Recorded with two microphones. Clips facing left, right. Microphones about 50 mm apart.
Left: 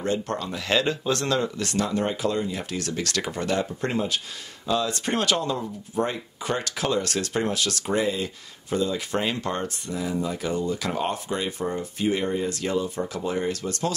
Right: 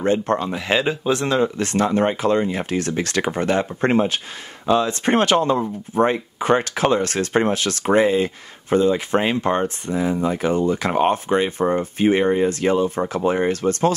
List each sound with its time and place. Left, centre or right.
0.0 s speech: right